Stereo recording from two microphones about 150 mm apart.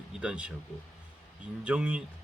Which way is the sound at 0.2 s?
5° right (ahead or behind).